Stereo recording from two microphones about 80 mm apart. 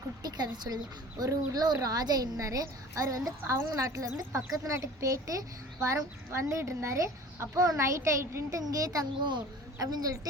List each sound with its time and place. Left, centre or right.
0.2 s a woman's voice: right
8.8 s a woman's voice: right